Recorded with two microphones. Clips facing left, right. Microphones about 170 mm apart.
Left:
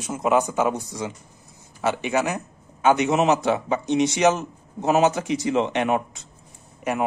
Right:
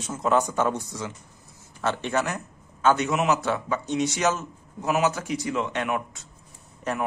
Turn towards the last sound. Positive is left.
turn(degrees=15)  # may be behind; listen again after turning